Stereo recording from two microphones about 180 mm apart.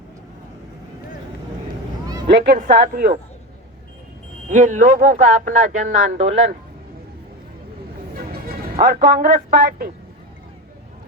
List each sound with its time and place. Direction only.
2.6 s speech: 50° right (ahead or behind)
4.4 s speech: 45° right (ahead or behind)
8.8 s speech: 55° right (ahead or behind)